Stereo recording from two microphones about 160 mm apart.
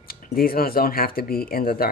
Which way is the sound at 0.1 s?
65° left (ahead or behind).